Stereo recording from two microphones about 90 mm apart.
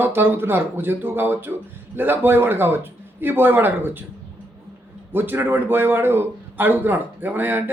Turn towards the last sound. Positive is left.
turn(degrees=-20)  # may be behind; listen again after turning